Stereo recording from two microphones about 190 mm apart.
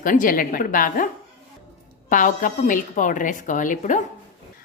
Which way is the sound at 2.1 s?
45° left (ahead or behind).